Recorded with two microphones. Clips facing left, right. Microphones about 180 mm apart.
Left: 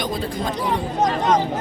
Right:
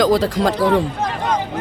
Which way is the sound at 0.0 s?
90° right.